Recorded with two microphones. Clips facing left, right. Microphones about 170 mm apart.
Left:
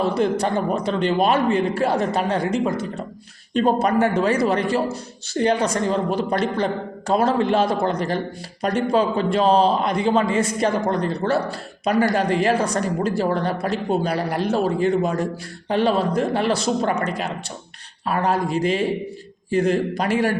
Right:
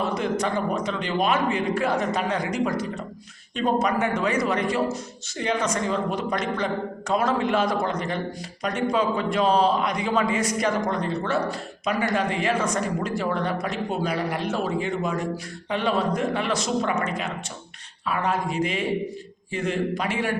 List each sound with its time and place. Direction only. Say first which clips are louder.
0.0 s a man's voice: left 5 dB; 30° left (ahead or behind)